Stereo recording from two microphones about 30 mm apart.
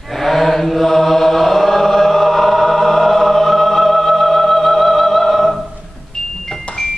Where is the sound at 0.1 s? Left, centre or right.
Centre.